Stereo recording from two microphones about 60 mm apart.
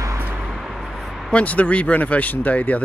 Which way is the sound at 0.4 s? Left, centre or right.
Centre.